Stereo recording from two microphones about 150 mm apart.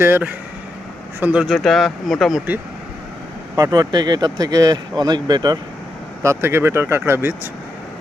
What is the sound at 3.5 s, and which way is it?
Speech, 25° right (ahead or behind).